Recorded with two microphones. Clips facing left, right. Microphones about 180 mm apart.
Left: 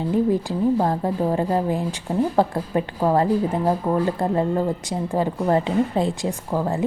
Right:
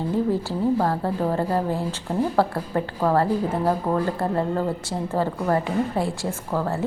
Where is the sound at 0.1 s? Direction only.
15° left (ahead or behind).